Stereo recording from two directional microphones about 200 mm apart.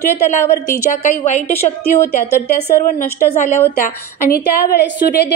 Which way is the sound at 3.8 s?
50° left (ahead or behind).